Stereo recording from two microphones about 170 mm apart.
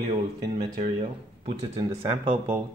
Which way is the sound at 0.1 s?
30° right (ahead or behind).